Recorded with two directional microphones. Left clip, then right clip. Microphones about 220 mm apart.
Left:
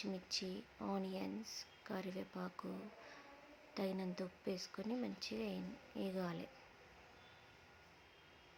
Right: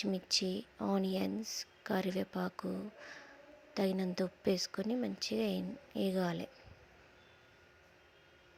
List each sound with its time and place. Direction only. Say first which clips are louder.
0.0 s speech: right 9 dB; 30° right (ahead or behind)